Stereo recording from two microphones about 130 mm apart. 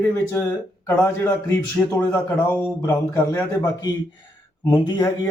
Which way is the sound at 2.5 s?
15° left (ahead or behind).